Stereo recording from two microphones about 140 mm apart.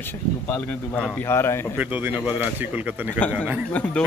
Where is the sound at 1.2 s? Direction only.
15° left (ahead or behind).